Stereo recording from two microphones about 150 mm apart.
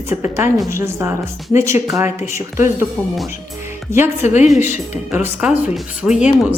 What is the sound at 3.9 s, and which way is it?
A woman's voice, 15° right (ahead or behind).